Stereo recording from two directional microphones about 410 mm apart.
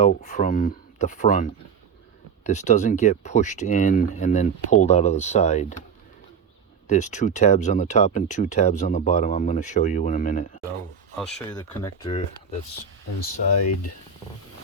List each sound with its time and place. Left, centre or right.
0.0 s speech: centre
6.8 s speech: centre
11.2 s speech: centre